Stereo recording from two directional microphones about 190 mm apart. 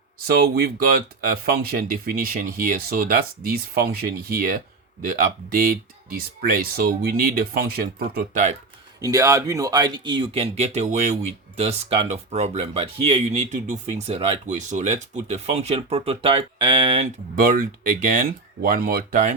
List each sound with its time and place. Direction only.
0.3 s speech: 55° right (ahead or behind)
9.0 s speech: 15° right (ahead or behind)
17.3 s speech: 45° right (ahead or behind)